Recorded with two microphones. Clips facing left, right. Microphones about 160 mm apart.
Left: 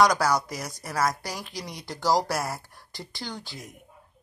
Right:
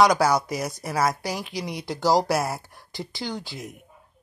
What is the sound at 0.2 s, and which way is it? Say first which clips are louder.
Speech: right 4 dB; 15° right (ahead or behind).